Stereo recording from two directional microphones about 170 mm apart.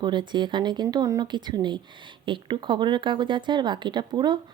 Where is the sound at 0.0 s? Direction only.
25° right (ahead or behind).